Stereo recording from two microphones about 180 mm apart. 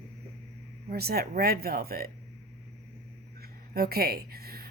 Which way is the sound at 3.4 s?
60° right (ahead or behind).